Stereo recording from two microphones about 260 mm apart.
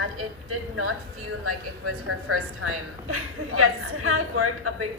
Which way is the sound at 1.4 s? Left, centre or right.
Right.